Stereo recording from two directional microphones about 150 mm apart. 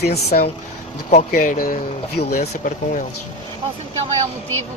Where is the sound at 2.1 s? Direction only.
45° left (ahead or behind).